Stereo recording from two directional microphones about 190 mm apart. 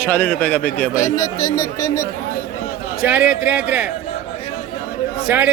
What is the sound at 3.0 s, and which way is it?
Speech, 5° right (ahead or behind).